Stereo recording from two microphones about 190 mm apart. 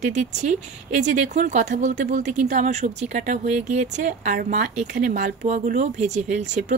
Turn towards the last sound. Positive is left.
turn(degrees=-40)  # may be behind; listen again after turning